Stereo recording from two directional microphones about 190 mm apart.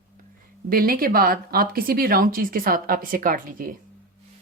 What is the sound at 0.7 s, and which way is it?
Speech, 50° right (ahead or behind).